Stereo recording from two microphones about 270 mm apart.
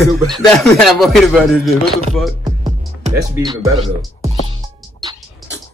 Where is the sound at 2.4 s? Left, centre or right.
Centre.